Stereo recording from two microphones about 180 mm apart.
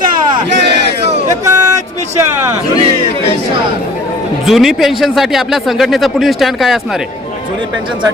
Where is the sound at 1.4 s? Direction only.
20° right (ahead or behind).